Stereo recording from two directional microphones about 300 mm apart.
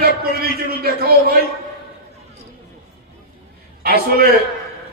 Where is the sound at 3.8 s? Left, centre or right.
Right.